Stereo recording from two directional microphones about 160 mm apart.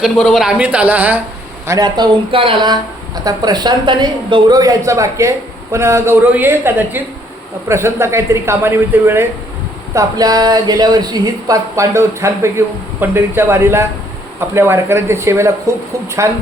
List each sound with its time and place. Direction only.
0.0 s speech: centre (ahead or behind)
1.6 s speech: 20° right (ahead or behind)